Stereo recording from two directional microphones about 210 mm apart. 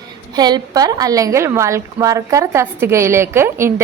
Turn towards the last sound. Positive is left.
turn(degrees=-10)  # may be behind; listen again after turning